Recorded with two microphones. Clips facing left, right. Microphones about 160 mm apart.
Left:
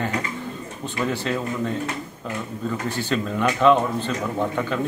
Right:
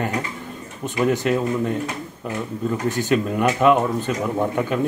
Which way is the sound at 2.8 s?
45° right (ahead or behind).